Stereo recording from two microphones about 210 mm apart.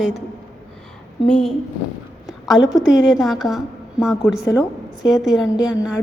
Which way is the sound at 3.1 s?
Centre (ahead or behind).